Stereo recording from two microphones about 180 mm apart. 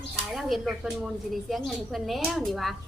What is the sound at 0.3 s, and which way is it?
A woman's voice, centre (ahead or behind).